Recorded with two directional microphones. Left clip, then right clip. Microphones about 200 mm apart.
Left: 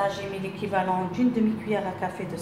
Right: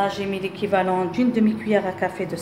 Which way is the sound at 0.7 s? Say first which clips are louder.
Right 5 dB; 50° right (ahead or behind).